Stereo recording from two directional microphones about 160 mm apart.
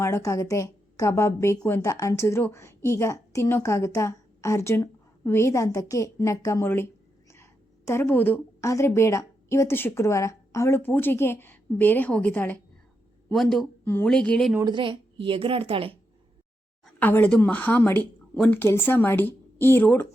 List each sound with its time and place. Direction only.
0.0 s a woman's voice: 20° left (ahead or behind)
7.9 s a woman's voice: 15° left (ahead or behind)
13.3 s a woman's voice: centre (ahead or behind)
14.6 s a woman's voice: 30° right (ahead or behind)
17.0 s a woman's voice: 10° left (ahead or behind)